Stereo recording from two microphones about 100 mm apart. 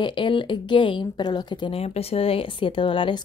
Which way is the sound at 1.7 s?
80° left.